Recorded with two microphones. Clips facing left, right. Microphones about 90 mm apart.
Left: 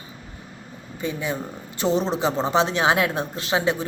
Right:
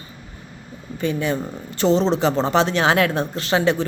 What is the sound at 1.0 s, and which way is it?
Speech, 65° right (ahead or behind).